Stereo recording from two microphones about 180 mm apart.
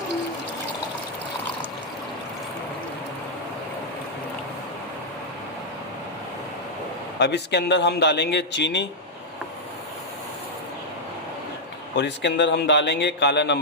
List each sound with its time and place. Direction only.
7.2 s a man's voice: 70° left (ahead or behind)
11.9 s a man's voice: 75° left (ahead or behind)